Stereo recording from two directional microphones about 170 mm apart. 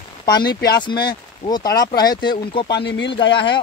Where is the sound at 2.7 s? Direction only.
90° left.